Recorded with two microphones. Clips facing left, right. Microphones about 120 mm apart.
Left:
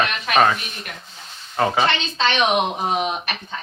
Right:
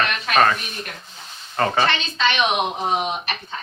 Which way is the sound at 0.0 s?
15° left (ahead or behind).